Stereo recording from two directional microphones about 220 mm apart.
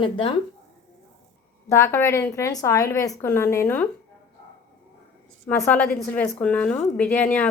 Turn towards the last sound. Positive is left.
turn(degrees=5)  # may be behind; listen again after turning